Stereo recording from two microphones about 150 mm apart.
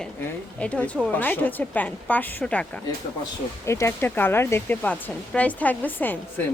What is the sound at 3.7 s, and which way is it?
Speech, 20° left (ahead or behind).